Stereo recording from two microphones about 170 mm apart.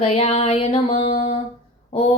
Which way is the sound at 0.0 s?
35° left (ahead or behind).